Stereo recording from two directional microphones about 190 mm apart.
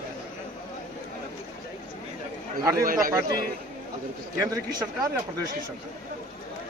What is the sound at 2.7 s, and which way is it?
Speech, 50° right (ahead or behind).